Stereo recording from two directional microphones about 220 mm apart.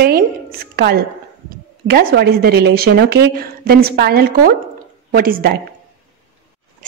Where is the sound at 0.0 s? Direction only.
45° right (ahead or behind).